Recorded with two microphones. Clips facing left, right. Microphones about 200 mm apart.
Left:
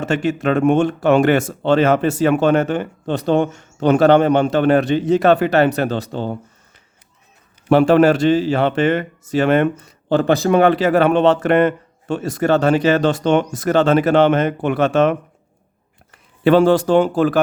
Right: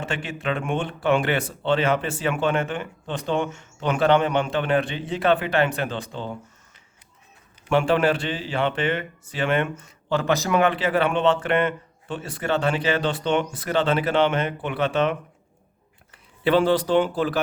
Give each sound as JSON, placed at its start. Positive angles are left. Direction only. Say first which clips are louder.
{"t": 0.0, "sound": "speech", "louder": "left 10 dB", "side_deg": 40}
{"t": 7.7, "sound": "speech", "louder": "left 8 dB", "side_deg": 40}